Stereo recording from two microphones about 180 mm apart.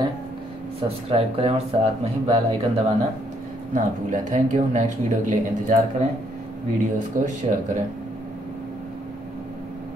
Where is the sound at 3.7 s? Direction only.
45° right (ahead or behind).